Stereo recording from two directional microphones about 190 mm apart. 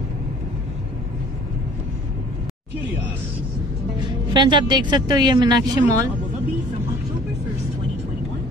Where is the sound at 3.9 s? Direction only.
25° right (ahead or behind).